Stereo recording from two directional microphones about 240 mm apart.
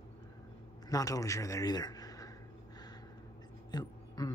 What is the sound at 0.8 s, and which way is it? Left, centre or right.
A man's voice, centre.